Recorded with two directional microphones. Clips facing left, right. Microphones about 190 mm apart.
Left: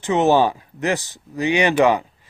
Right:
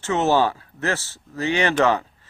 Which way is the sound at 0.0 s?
15° left (ahead or behind).